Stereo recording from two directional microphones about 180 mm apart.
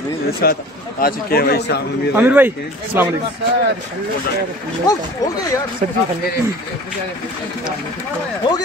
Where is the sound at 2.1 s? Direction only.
10° right (ahead or behind).